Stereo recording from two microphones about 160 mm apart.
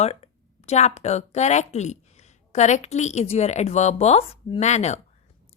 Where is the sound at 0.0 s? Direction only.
40° left (ahead or behind).